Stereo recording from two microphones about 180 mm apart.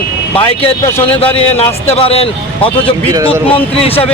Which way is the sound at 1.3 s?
35° left (ahead or behind).